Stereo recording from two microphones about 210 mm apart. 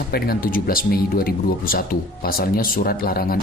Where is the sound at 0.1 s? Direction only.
45° left (ahead or behind).